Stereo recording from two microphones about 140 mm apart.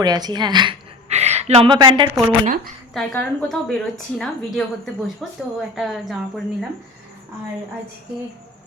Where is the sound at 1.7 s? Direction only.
35° right (ahead or behind).